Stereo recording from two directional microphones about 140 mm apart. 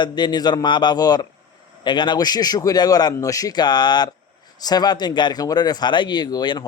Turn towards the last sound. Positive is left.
turn(degrees=30)  # may be behind; listen again after turning